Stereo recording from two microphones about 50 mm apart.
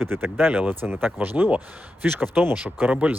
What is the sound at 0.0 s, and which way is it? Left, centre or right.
Speech, right.